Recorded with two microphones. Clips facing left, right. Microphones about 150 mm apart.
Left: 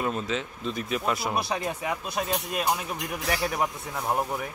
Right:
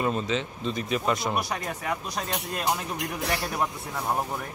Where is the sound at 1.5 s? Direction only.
15° left (ahead or behind).